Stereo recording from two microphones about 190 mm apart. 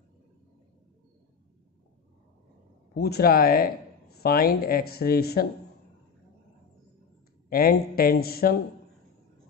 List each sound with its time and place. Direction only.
2.9 s speech: 55° left (ahead or behind)
7.4 s speech: 50° left (ahead or behind)